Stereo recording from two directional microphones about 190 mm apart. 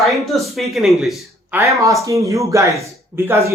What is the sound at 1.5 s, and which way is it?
Speech, 15° right (ahead or behind).